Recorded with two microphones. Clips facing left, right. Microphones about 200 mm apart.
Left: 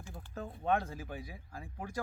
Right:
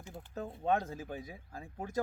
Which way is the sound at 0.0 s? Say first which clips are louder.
Right 2 dB; 20° right (ahead or behind).